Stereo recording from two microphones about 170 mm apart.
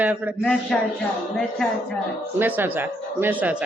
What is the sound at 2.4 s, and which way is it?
Speech, 10° right (ahead or behind).